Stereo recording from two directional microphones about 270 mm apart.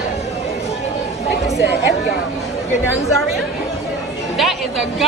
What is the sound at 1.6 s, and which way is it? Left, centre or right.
Speech, left.